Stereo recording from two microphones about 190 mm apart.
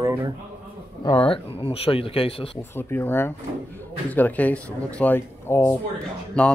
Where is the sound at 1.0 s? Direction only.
25° left (ahead or behind).